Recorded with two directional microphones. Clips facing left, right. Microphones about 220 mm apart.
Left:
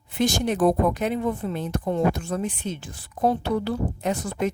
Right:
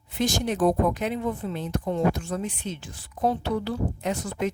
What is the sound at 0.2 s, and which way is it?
Speech, 60° left (ahead or behind).